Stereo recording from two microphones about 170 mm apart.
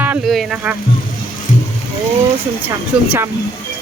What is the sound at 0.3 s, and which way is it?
Speech, centre (ahead or behind).